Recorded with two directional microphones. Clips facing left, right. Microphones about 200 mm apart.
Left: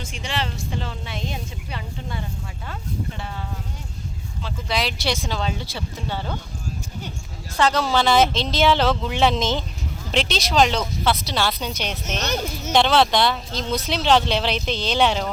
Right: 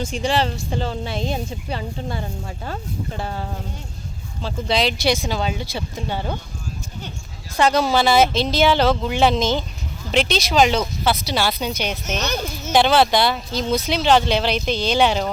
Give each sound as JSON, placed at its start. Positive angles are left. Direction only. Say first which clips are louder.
{"t": 0.0, "sound": "a woman's voice", "louder": "right 8 dB", "side_deg": -35}
{"t": 4.4, "sound": "speech", "louder": "right 5 dB", "side_deg": -25}
{"t": 5.1, "sound": "speech", "louder": "right 3 dB", "side_deg": -10}
{"t": 7.5, "sound": "speech", "louder": "right 3 dB", "side_deg": -10}